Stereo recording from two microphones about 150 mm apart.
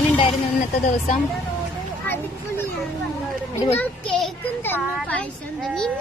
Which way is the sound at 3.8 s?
5° left (ahead or behind).